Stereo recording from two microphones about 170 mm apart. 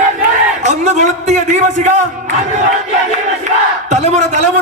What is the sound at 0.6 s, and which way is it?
A man's voice, 45° right (ahead or behind).